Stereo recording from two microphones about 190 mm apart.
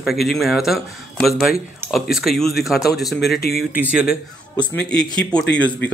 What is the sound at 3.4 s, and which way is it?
Speech, 55° left (ahead or behind).